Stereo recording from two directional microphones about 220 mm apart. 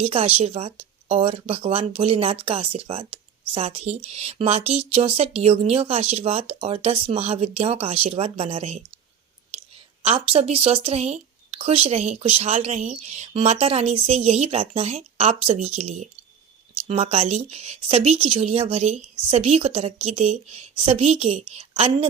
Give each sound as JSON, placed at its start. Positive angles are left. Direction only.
{"t": 0.0, "sound": "speech", "side_deg": -25}
{"t": 10.0, "sound": "speech", "side_deg": -25}